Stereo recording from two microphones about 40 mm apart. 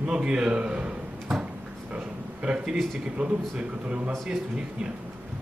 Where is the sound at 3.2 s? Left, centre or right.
Right.